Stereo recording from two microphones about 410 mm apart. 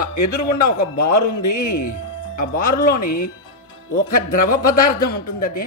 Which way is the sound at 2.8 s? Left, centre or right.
Left.